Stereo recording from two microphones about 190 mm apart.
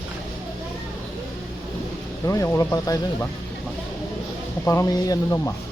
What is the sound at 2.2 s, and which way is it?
Speech, 15° left (ahead or behind).